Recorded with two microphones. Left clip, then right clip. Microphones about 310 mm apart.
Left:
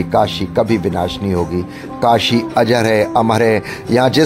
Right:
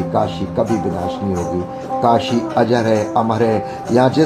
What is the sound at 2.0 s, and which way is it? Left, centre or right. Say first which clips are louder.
Speech: left 3 dB; left.